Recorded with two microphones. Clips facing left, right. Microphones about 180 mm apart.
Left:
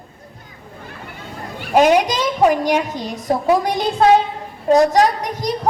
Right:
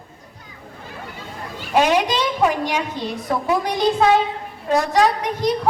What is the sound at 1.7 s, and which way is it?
A woman's voice, 45° left (ahead or behind).